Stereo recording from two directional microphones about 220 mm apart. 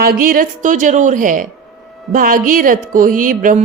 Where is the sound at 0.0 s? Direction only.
40° right (ahead or behind).